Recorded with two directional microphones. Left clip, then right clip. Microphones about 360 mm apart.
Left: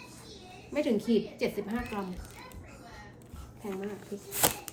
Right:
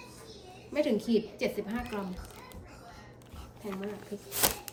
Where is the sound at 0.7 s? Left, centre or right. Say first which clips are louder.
Even; centre.